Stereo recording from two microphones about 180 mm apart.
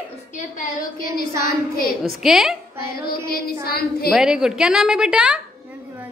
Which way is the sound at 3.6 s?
60° left (ahead or behind).